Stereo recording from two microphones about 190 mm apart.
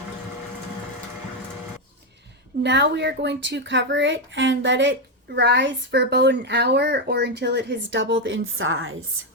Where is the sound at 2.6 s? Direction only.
65° right (ahead or behind).